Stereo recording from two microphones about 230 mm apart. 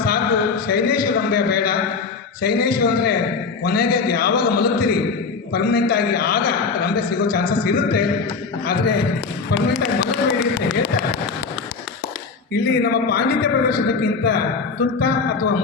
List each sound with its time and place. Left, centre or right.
0.0 s a man's voice: left
12.5 s a man's voice: left